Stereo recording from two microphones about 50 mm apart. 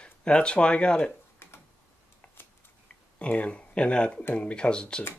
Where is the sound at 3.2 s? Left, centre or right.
Left.